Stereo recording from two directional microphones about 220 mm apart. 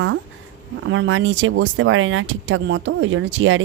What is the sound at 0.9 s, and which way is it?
Speech, 60° right (ahead or behind).